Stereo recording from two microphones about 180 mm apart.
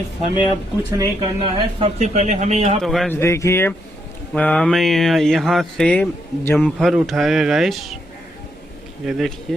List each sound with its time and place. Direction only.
0.9 s speech: 20° right (ahead or behind)
2.0 s speech: 40° right (ahead or behind)
2.8 s speech: centre (ahead or behind)
3.1 s speech: 15° left (ahead or behind); by 7.9 s centre (ahead or behind)
9.0 s speech: centre (ahead or behind)